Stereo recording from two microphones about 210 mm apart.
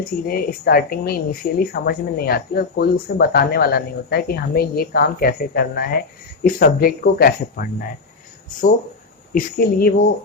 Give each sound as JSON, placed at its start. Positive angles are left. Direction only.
{"t": 0.3, "sound": "speech", "side_deg": 45}
{"t": 9.3, "sound": "speech", "side_deg": 45}